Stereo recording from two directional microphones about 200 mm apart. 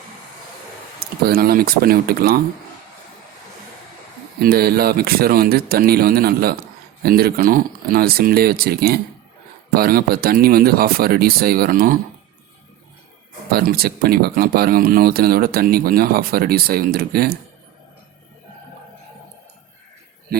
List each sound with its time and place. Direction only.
0.9 s speech: 50° right (ahead or behind)
4.4 s speech: 50° right (ahead or behind)
13.5 s speech: 50° right (ahead or behind)